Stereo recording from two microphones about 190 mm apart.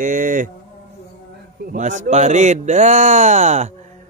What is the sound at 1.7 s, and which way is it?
A man's voice, 40° right (ahead or behind).